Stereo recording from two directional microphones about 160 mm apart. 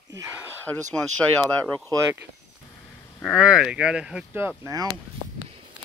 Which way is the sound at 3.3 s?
5° right (ahead or behind).